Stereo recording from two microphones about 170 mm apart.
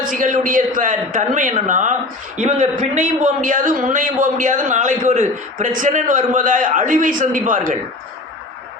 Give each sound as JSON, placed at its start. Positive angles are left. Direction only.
{"t": 0.1, "sound": "a man's voice", "side_deg": -50}